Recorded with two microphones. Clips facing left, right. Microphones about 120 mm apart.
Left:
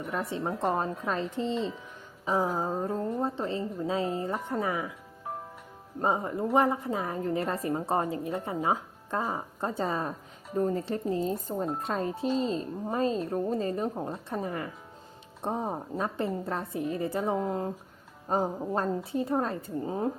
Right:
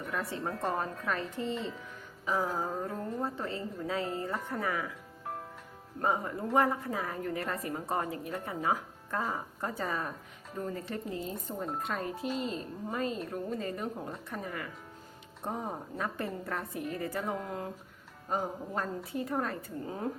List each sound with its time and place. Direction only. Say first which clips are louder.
0.1 s speech: left 4 dB; 20° left (ahead or behind)
6.0 s speech: left 4 dB; 25° left (ahead or behind)